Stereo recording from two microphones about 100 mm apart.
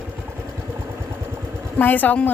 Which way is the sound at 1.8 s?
20° left (ahead or behind).